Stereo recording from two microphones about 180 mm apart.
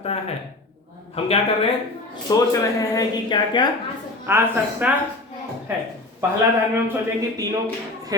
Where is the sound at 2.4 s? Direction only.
20° left (ahead or behind).